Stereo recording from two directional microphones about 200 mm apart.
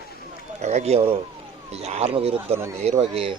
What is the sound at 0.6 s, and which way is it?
Speech, 30° right (ahead or behind).